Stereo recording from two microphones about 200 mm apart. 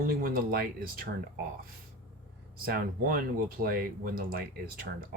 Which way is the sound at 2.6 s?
45° right (ahead or behind).